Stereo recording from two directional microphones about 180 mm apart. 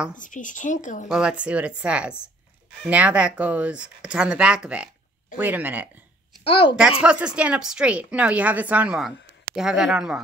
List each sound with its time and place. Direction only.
0.2 s speech: 45° left (ahead or behind)
1.0 s a woman's voice: 5° right (ahead or behind)
6.4 s a woman's voice: 30° left (ahead or behind)
7.0 s a woman's voice: 5° right (ahead or behind)